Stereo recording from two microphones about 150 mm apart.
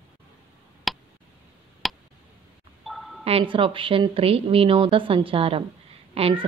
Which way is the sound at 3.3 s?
35° right (ahead or behind).